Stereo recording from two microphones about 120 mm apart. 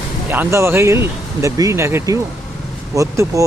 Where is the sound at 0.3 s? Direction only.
20° right (ahead or behind).